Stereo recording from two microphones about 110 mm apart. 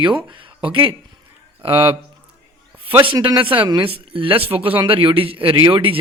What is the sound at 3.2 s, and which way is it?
A man's voice, 50° right (ahead or behind).